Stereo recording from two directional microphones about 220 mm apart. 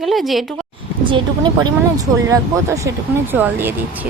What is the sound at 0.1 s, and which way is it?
Speech, centre (ahead or behind).